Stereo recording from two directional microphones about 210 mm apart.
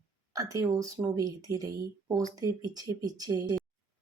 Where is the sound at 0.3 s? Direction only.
15° right (ahead or behind).